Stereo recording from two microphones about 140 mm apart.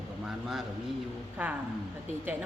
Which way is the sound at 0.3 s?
5° right (ahead or behind).